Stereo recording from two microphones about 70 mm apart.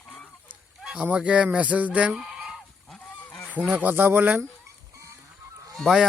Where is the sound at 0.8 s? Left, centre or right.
Centre.